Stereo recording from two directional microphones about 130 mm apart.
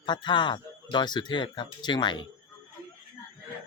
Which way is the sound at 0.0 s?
35° left (ahead or behind).